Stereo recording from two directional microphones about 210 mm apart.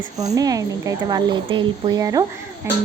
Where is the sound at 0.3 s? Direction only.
15° right (ahead or behind).